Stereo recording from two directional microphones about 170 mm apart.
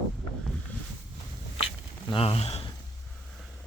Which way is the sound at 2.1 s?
35° left (ahead or behind).